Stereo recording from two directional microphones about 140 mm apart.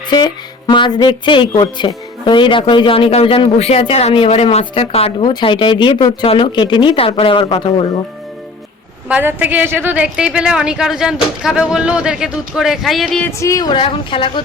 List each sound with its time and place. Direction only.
0.7 s speech: 30° left (ahead or behind)
5.2 s speech: 35° left (ahead or behind)
9.0 s a woman's voice: 10° right (ahead or behind)
13.2 s speech: 20° left (ahead or behind); by 14.4 s 40° left (ahead or behind)